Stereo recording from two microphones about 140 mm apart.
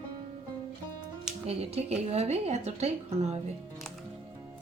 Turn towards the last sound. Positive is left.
turn(degrees=-50)  # may be behind; listen again after turning